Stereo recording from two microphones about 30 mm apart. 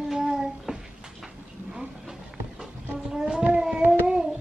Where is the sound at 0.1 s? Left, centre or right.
Centre.